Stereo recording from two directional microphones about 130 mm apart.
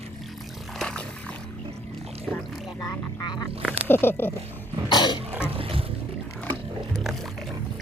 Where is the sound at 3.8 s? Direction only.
15° left (ahead or behind).